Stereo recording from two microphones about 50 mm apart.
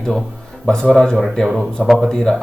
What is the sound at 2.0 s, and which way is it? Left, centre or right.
Speech, centre.